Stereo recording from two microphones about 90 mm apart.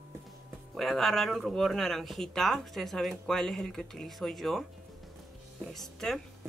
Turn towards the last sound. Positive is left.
turn(degrees=5)  # may be behind; listen again after turning